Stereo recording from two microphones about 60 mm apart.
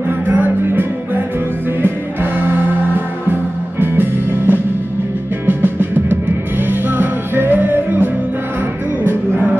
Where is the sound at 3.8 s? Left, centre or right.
Right.